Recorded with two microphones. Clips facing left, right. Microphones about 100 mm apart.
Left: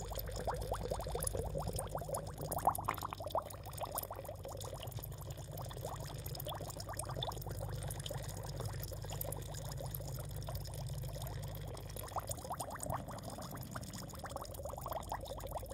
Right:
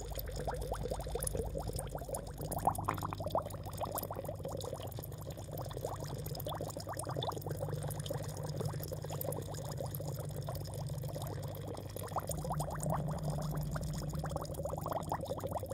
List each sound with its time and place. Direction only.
0.5 s boiling: centre (ahead or behind)
2.1 s boiling: 15° left (ahead or behind)
2.9 s a sound: 5° right (ahead or behind)
12.4 s boiling: 15° right (ahead or behind)
14.3 s boiling: 20° right (ahead or behind)